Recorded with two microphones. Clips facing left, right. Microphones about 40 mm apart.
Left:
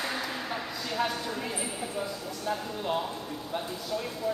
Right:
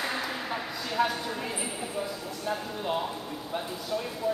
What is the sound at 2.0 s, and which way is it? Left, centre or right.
Speech, centre.